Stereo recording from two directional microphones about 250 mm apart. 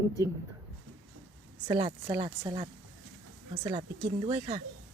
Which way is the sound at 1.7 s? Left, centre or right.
Centre.